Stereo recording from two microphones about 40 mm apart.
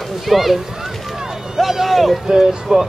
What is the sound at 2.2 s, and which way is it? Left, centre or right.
Speech, centre.